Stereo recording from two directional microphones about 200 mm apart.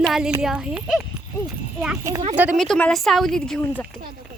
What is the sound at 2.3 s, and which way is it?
Speech, 10° right (ahead or behind).